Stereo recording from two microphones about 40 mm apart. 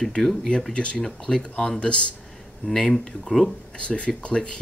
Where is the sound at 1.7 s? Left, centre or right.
Left.